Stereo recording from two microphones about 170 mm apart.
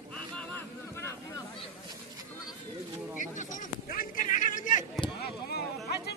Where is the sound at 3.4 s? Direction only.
50° left (ahead or behind).